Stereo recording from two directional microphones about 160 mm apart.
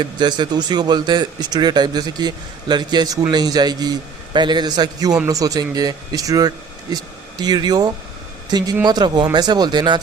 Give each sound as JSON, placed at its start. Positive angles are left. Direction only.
{"t": 0.0, "sound": "speech", "side_deg": -30}